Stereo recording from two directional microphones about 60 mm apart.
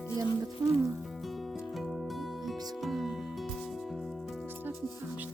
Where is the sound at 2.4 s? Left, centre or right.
Centre.